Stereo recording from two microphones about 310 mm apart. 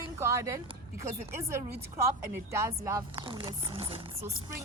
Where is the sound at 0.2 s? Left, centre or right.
Centre.